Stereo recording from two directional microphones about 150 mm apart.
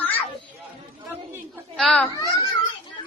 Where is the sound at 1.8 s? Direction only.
5° left (ahead or behind).